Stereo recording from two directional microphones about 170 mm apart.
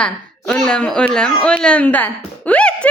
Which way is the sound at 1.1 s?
5° left (ahead or behind).